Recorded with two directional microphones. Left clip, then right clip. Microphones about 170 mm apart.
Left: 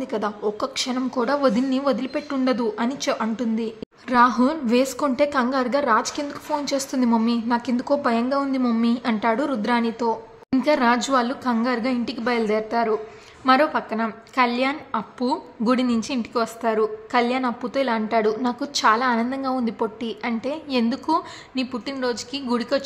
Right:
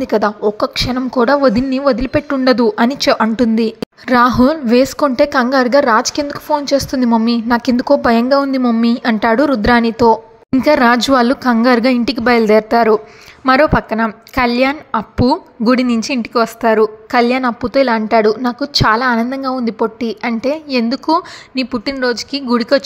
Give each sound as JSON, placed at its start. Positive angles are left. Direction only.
{"t": 0.0, "sound": "a woman's voice", "side_deg": -40}